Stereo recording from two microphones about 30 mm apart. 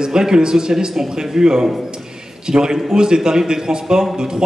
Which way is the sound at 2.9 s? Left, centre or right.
Right.